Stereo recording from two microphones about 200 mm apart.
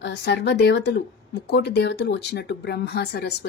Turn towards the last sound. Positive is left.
turn(degrees=55)  # may be behind; listen again after turning